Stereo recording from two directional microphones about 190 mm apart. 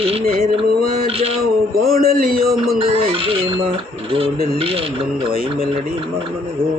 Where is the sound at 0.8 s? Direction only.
50° right (ahead or behind).